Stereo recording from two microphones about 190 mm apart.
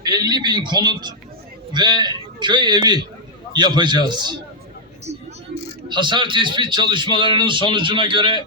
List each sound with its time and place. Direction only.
0.0 s a man's voice: 20° right (ahead or behind)
5.9 s a man's voice: 25° right (ahead or behind)